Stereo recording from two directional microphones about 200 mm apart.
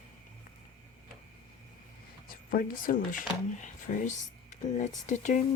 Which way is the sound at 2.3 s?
45° left (ahead or behind).